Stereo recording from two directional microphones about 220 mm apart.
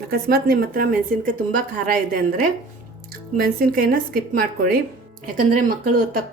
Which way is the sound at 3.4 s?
40° right (ahead or behind).